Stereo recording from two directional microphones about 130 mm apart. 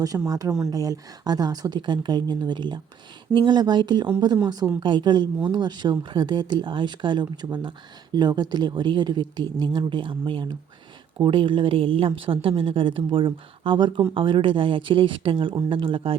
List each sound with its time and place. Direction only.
0.3 s a woman's voice: 25° right (ahead or behind)